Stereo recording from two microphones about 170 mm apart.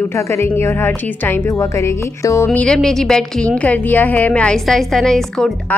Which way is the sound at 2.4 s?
5° left (ahead or behind).